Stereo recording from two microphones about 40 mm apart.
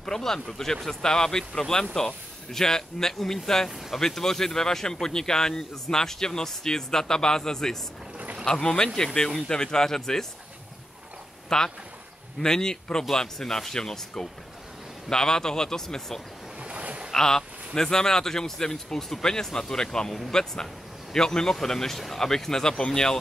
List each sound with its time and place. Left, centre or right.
0.0 s speech: centre
11.4 s speech: centre
16.6 s boat: right
17.1 s speech: centre